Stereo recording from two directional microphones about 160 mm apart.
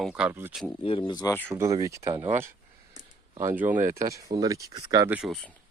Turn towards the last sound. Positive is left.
turn(degrees=5)  # may be behind; listen again after turning